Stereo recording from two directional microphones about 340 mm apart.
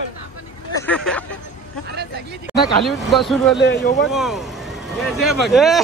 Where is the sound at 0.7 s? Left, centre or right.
Centre.